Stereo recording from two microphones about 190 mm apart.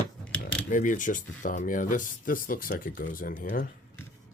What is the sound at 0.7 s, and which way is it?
Speech, 45° left (ahead or behind).